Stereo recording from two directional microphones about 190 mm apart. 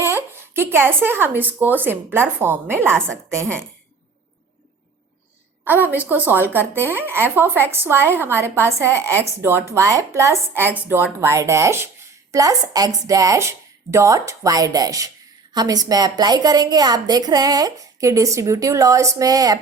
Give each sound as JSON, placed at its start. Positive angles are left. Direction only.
{"t": 0.0, "sound": "a woman's voice", "side_deg": -15}
{"t": 5.6, "sound": "a woman's voice", "side_deg": -10}